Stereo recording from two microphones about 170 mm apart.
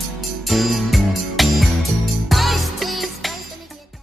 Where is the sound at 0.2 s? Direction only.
Centre (ahead or behind).